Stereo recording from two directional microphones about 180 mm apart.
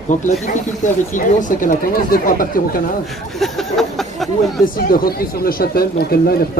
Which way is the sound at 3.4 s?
Centre (ahead or behind).